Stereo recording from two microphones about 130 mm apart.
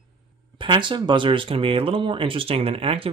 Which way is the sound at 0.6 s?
40° right (ahead or behind).